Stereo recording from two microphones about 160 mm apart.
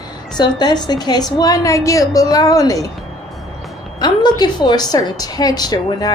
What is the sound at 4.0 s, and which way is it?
A woman's voice, 25° left (ahead or behind).